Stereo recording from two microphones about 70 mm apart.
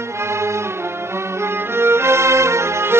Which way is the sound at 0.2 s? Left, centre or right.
Right.